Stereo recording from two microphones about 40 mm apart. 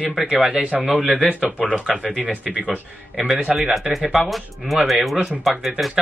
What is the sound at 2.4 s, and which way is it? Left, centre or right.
Speech, right.